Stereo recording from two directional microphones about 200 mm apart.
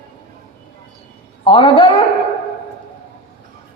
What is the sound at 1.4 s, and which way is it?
Speech, 25° left (ahead or behind).